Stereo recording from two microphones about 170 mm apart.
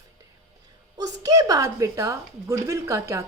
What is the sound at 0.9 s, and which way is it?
A woman's voice, 20° right (ahead or behind).